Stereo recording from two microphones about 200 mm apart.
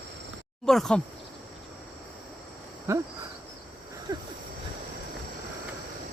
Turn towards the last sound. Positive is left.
turn(degrees=-20)  # may be behind; listen again after turning